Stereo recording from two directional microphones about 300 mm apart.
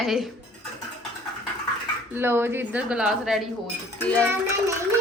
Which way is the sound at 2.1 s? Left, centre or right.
Centre.